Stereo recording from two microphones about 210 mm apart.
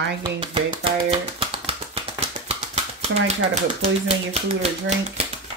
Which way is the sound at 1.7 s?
30° right (ahead or behind).